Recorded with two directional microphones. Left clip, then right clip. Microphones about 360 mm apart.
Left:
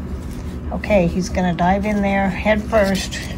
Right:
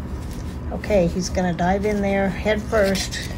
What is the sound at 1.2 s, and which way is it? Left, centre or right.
A woman's voice, centre.